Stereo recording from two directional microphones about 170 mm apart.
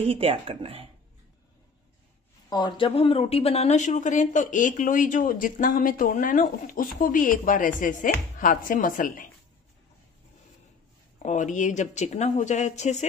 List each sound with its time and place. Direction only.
0.0 s speech: 35° right (ahead or behind)
2.5 s speech: 30° left (ahead or behind); by 9.3 s 50° left (ahead or behind)
11.2 s speech: 45° left (ahead or behind)